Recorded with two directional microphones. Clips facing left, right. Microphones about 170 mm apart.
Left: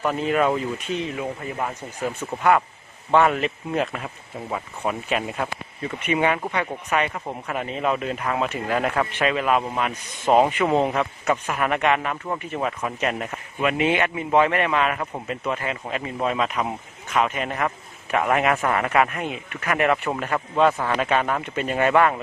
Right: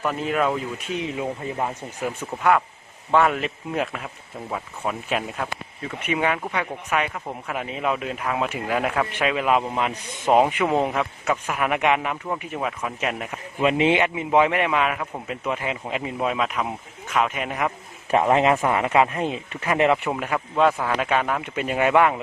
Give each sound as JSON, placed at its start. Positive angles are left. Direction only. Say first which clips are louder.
{"t": 0.0, "sound": "speech", "louder": "left 2 dB", "side_deg": 0}
{"t": 0.9, "sound": "speech", "louder": "even", "side_deg": -20}
{"t": 2.4, "sound": "speech", "louder": "left 1 dB", "side_deg": 0}
{"t": 13.6, "sound": "speech", "louder": "right 2 dB", "side_deg": -25}
{"t": 16.1, "sound": "speech", "louder": "left 1 dB", "side_deg": -5}
{"t": 18.2, "sound": "speech", "louder": "right 2 dB", "side_deg": -20}
{"t": 20.1, "sound": "speech", "louder": "even", "side_deg": -5}